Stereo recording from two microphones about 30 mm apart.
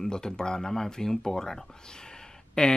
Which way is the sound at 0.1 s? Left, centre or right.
Left.